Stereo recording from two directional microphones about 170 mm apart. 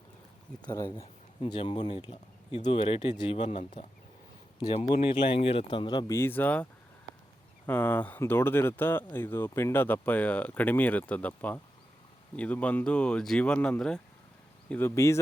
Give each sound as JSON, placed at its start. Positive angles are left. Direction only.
{"t": 0.6, "sound": "speech", "side_deg": 25}
{"t": 2.6, "sound": "speech", "side_deg": 40}
{"t": 6.1, "sound": "speech", "side_deg": 10}
{"t": 7.7, "sound": "speech", "side_deg": 10}